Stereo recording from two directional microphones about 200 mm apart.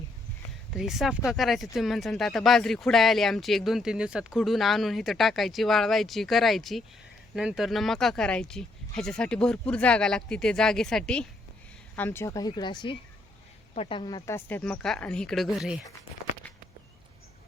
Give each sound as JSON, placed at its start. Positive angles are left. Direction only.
{"t": 0.7, "sound": "speech", "side_deg": 0}